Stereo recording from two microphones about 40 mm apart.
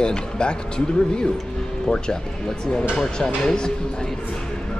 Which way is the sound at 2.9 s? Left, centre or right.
Centre.